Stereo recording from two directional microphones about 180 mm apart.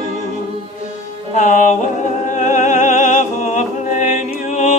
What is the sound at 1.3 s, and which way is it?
Music, 40° left (ahead or behind).